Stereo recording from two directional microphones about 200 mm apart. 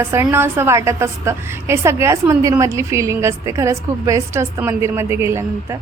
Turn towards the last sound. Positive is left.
turn(degrees=-15)  # may be behind; listen again after turning